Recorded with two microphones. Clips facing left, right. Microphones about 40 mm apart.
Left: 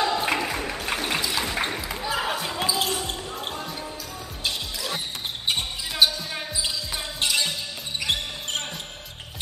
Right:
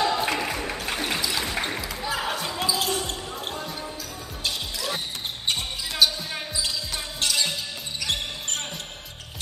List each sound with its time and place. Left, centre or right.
0.0 s music: centre
2.6 s basketball bounce: centre
4.5 s music: centre
6.0 s basketball bounce: left
7.2 s music: centre